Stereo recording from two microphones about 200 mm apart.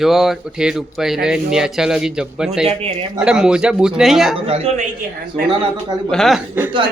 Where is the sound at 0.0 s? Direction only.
Centre (ahead or behind).